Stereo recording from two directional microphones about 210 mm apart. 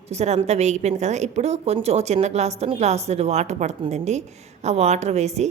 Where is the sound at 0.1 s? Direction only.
30° right (ahead or behind).